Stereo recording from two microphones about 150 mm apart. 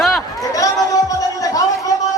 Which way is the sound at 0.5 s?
25° left (ahead or behind).